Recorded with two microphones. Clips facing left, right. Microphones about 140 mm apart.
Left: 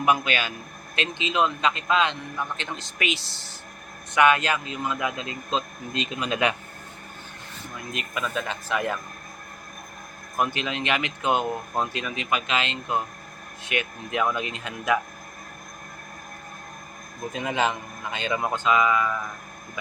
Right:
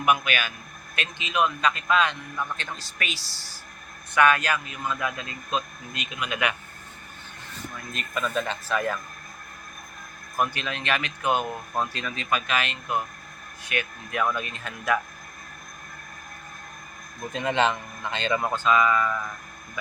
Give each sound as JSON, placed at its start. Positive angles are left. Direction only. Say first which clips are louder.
{"t": 0.0, "sound": "speech", "louder": "left 1 dB", "side_deg": 25}
{"t": 7.9, "sound": "a man's voice", "louder": "right 2 dB", "side_deg": 5}
{"t": 8.7, "sound": "a man's voice", "louder": "even", "side_deg": 15}
{"t": 10.3, "sound": "speech", "louder": "left 1 dB", "side_deg": 20}
{"t": 17.3, "sound": "a man's voice", "louder": "right 2 dB", "side_deg": 5}